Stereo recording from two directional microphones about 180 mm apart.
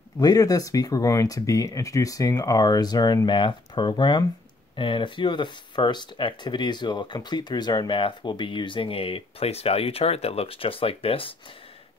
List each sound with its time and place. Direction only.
0.2 s speech: 20° left (ahead or behind)